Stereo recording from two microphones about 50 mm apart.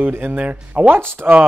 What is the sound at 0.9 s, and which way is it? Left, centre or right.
Speech, right.